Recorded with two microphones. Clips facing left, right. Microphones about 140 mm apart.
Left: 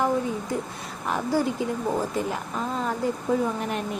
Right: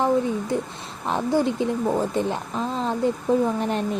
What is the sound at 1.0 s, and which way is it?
A woman's voice, 25° right (ahead or behind).